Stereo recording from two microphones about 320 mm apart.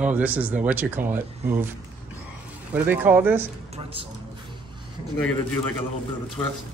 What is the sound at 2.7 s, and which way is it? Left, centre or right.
Speech, centre.